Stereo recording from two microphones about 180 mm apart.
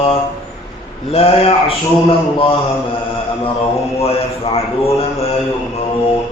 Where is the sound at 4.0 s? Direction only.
35° left (ahead or behind).